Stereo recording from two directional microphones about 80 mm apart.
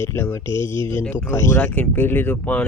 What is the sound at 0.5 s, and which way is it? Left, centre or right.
Speech, right.